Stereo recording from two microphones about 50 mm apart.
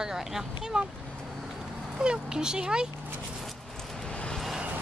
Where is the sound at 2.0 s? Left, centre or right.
Centre.